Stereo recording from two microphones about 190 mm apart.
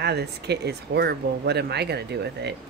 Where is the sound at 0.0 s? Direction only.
60° right (ahead or behind).